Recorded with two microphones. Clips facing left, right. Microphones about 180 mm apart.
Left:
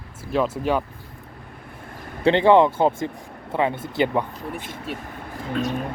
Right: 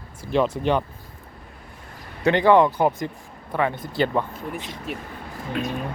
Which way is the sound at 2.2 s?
25° left (ahead or behind).